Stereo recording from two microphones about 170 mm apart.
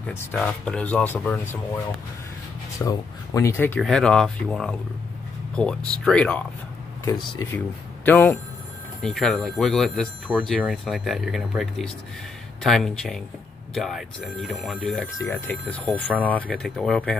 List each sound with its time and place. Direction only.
0.0 s speech: 10° left (ahead or behind)
2.8 s speech: 20° left (ahead or behind)
7.1 s speech: 20° left (ahead or behind)
7.5 s speech: 10° left (ahead or behind)
15.1 s speech: 10° left (ahead or behind)